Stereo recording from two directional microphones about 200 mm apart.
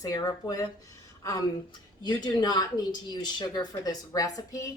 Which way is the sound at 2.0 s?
20° left (ahead or behind).